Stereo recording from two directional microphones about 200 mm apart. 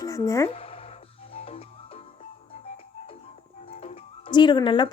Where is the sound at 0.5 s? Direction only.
30° left (ahead or behind).